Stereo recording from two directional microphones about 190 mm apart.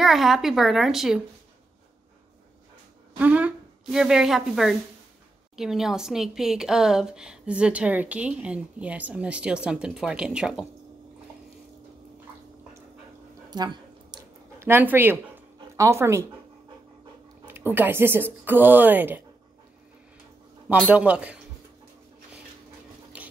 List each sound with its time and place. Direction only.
0.0 s a woman's voice: centre (ahead or behind)
3.2 s a woman's voice: 5° right (ahead or behind)
13.5 s a sound: 20° right (ahead or behind)
14.7 s speech: 10° right (ahead or behind)
17.5 s speech: 10° right (ahead or behind)
20.6 s speech: 5° right (ahead or behind)